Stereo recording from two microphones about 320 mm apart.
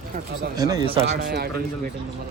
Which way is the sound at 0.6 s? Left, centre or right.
Centre.